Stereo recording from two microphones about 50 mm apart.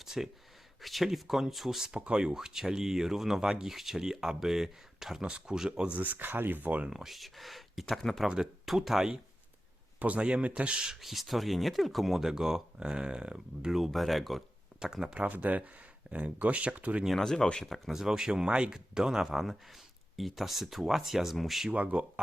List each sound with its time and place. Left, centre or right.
0.0 s a sound: centre
0.8 s speech: centre
6.0 s speech: right
6.9 s speech: centre
8.3 s speech: centre
10.0 s a man's voice: right
11.0 s speech: centre
13.7 s speech: centre
14.8 s speech: centre
15.3 s a man's voice: right
17.1 s speech: centre
17.8 s speech: centre
21.7 s a man's voice: right